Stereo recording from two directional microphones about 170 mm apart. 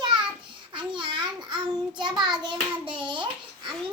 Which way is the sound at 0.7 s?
25° right (ahead or behind).